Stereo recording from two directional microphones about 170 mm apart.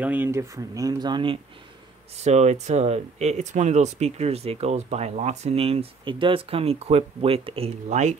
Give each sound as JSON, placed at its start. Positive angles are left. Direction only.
{"t": 0.0, "sound": "speech", "side_deg": -10}
{"t": 2.1, "sound": "speech", "side_deg": -40}